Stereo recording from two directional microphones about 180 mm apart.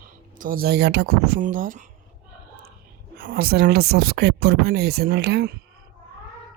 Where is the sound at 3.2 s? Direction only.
55° right (ahead or behind).